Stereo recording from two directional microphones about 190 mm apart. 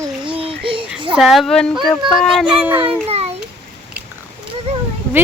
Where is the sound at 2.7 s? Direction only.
25° right (ahead or behind).